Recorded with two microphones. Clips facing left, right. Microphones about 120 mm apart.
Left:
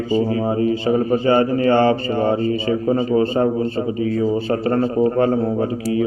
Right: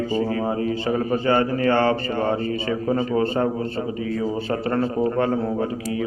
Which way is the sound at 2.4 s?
50° right (ahead or behind).